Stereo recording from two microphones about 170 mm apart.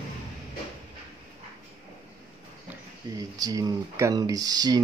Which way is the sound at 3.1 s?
20° right (ahead or behind).